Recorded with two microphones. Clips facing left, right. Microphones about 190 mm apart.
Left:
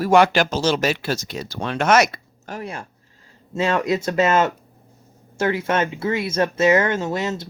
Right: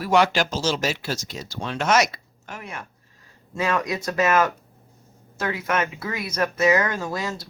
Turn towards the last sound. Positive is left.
turn(degrees=25)  # may be behind; listen again after turning